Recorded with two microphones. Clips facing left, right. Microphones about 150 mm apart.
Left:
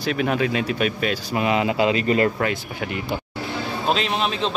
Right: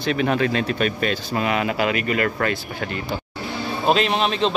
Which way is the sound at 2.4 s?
15° left (ahead or behind).